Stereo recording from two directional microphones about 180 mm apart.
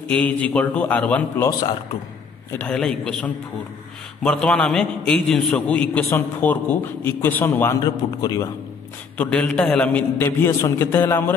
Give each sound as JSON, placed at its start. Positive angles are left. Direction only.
{"t": 0.1, "sound": "a man's voice", "side_deg": 10}
{"t": 2.6, "sound": "a man's voice", "side_deg": 5}
{"t": 7.8, "sound": "a man's voice", "side_deg": 20}
{"t": 9.2, "sound": "a man's voice", "side_deg": 5}